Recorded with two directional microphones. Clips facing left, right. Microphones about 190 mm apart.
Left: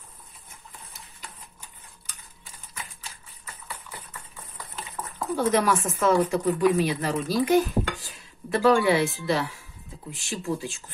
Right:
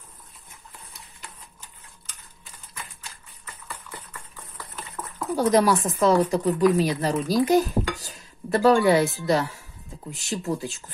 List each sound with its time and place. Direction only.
5.3 s speech: 35° right (ahead or behind)